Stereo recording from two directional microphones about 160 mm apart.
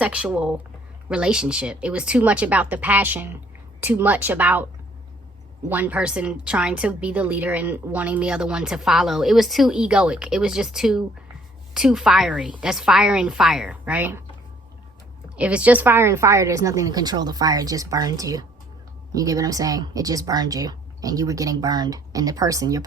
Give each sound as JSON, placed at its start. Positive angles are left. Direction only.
{"t": 0.0, "sound": "a woman's voice", "side_deg": -5}
{"t": 5.6, "sound": "a woman's voice", "side_deg": -10}
{"t": 15.4, "sound": "speech", "side_deg": -10}